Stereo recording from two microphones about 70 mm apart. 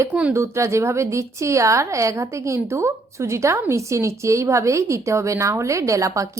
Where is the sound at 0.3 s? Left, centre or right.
Right.